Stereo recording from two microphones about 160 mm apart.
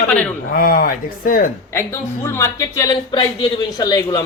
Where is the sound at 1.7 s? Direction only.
15° left (ahead or behind).